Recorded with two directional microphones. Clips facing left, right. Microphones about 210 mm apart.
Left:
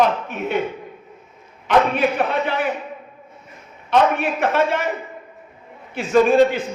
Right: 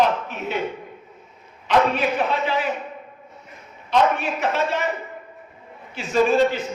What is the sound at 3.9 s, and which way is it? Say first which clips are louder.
Speech: left 2 dB; 55° left (ahead or behind).